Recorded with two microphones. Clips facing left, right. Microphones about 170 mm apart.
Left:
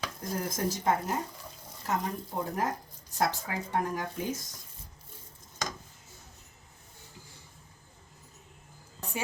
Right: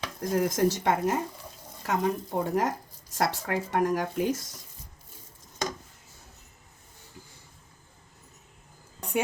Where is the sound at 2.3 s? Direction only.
70° right (ahead or behind).